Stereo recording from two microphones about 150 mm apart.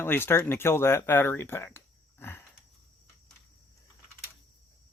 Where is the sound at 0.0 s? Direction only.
15° left (ahead or behind).